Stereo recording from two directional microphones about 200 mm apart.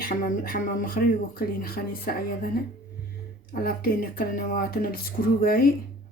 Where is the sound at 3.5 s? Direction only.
50° left (ahead or behind).